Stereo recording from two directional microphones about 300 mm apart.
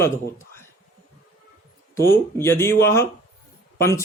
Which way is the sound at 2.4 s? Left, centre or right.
Centre.